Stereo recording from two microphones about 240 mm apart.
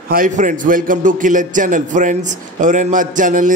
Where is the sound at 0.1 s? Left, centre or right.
Right.